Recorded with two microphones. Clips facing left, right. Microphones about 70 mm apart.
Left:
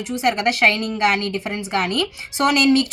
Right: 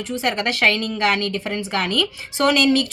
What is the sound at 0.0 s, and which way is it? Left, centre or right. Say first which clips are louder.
Speech: left 3 dB; centre.